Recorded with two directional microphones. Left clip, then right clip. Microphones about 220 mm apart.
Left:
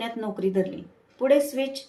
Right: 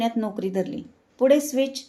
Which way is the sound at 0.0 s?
50° right (ahead or behind).